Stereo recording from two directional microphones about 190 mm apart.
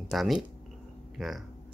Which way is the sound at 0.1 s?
Centre (ahead or behind).